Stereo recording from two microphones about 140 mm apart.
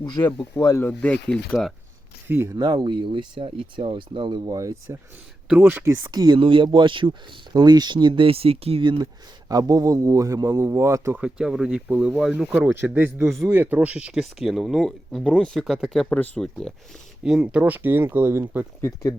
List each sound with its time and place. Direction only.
0.0 s speech: 30° left (ahead or behind)
0.9 s speech: 10° left (ahead or behind)
2.2 s speech: 15° right (ahead or behind)
2.6 s speech: 30° right (ahead or behind)
5.5 s speech: 10° right (ahead or behind)
6.0 s a man's voice: 30° right (ahead or behind)
11.2 s speech: 5° right (ahead or behind)
17.2 s speech: 5° right (ahead or behind)
18.8 s speech: 20° left (ahead or behind)